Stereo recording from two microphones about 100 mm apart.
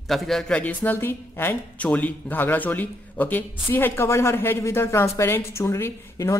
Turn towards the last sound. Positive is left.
turn(degrees=35)  # may be behind; listen again after turning